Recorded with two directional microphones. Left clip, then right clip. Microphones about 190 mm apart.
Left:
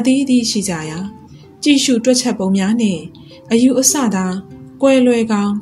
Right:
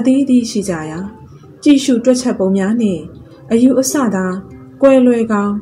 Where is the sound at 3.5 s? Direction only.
15° left (ahead or behind).